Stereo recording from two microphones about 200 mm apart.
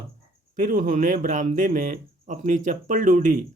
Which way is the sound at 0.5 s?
45° right (ahead or behind).